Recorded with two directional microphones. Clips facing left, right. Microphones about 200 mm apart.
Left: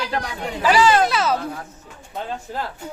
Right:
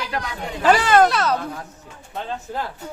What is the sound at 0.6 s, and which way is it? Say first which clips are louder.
Speech: right 1 dB; 55° right (ahead or behind).